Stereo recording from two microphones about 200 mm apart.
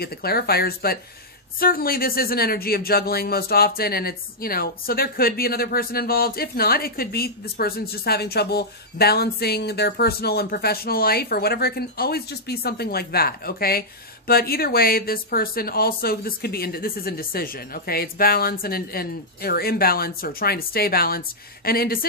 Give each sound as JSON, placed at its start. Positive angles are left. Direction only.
{"t": 0.0, "sound": "speech", "side_deg": 50}